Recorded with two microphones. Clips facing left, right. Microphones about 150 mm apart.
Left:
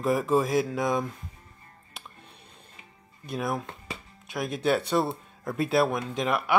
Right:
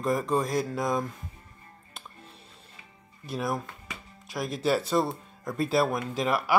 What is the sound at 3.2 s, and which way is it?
Speech, centre (ahead or behind).